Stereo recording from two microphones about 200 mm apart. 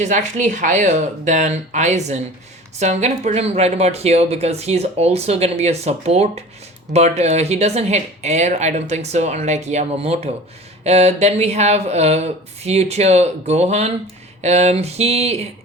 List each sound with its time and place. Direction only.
0.0 s speech: 35° right (ahead or behind)